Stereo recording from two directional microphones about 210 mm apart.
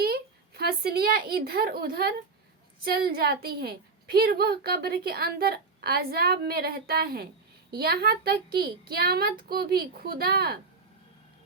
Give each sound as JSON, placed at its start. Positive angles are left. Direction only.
{"t": 0.0, "sound": "a woman's voice", "side_deg": -50}